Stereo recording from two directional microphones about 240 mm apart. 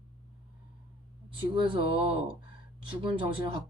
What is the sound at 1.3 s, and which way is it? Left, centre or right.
Speech, right.